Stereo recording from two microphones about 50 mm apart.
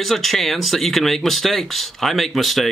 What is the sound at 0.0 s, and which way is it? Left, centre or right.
Speech, centre.